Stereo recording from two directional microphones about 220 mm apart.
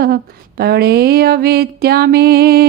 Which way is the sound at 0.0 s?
45° right (ahead or behind).